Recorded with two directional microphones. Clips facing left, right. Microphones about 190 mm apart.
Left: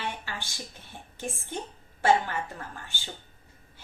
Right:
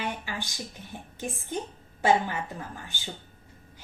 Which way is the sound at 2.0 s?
15° right (ahead or behind).